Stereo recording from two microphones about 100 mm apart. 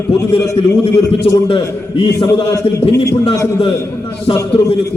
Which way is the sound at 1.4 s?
60° left (ahead or behind).